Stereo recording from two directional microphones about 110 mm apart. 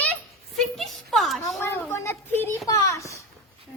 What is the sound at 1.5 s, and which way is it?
Speech, 20° left (ahead or behind).